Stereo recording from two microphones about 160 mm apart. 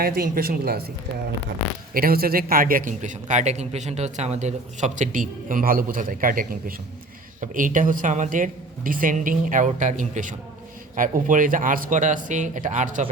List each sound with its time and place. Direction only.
0.0 s speech: 65° right (ahead or behind)
1.9 s a man's voice: 65° right (ahead or behind); by 13.1 s 50° right (ahead or behind)